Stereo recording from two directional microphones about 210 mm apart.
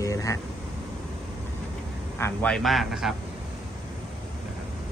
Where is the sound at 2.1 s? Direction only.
10° left (ahead or behind).